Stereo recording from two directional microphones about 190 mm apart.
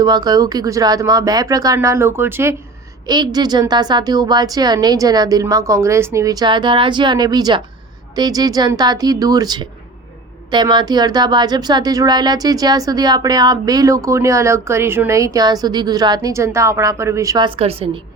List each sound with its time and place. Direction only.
0.0 s speech: 20° right (ahead or behind)